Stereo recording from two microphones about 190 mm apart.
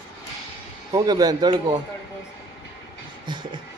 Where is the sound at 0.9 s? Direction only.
20° right (ahead or behind).